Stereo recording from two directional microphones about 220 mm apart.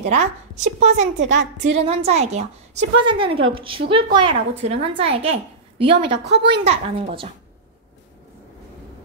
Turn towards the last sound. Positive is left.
turn(degrees=-25)  # may be behind; listen again after turning